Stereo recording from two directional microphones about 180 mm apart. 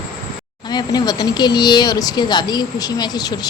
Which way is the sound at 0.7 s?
25° left (ahead or behind).